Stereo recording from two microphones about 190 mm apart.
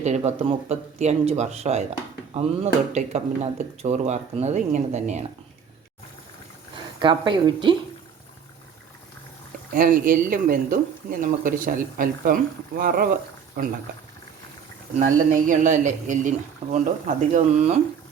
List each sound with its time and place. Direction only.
0.0 s speech: 35° right (ahead or behind)
2.9 s speech: 35° right (ahead or behind)
7.0 s a woman's voice: 25° right (ahead or behind)
9.7 s speech: 45° right (ahead or behind)
14.9 s speech: 45° right (ahead or behind)